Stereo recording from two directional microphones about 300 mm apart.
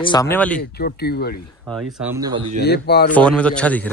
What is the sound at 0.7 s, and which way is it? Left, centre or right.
Speech, left.